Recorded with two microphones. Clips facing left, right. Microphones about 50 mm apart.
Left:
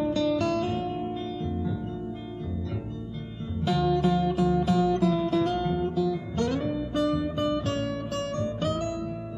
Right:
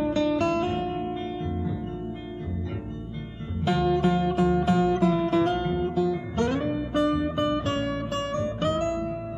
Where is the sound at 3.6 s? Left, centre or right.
Right.